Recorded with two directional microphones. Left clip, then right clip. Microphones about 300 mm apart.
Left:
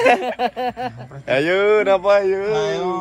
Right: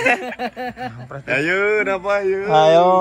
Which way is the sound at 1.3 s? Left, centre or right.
Left.